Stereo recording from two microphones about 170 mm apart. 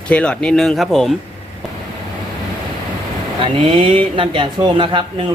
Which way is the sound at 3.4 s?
30° right (ahead or behind).